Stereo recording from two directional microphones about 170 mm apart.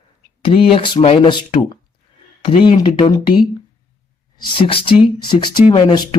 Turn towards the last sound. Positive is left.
turn(degrees=25)  # may be behind; listen again after turning